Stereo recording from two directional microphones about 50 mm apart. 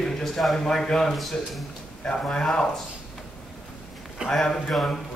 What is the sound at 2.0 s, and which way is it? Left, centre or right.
Speech, centre.